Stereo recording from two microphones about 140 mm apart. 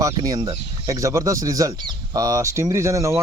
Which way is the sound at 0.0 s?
25° right (ahead or behind).